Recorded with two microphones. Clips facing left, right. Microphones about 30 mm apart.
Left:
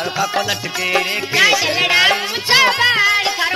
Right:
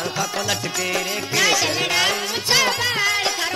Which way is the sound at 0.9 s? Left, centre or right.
Left.